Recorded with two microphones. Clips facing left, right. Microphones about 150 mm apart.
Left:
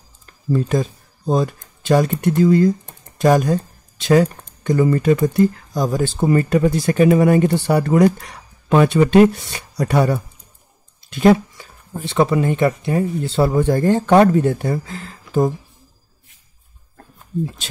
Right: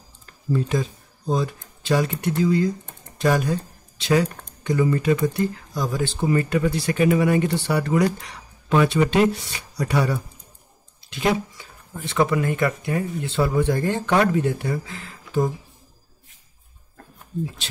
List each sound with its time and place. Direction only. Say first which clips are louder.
0.5 s speech: left 4 dB; 45° left (ahead or behind)
11.9 s speech: left 4 dB; 30° left (ahead or behind)